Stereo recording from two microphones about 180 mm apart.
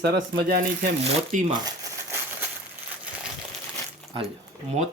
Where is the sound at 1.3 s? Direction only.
45° right (ahead or behind).